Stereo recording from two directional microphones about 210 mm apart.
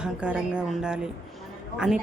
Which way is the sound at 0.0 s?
5° right (ahead or behind).